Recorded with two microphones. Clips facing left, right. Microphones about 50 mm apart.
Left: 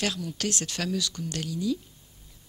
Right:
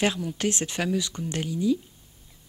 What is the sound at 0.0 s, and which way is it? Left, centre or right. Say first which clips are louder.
Speech: right 5 dB; right.